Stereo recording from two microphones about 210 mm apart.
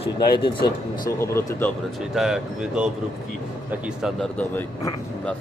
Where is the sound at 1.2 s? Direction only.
15° left (ahead or behind).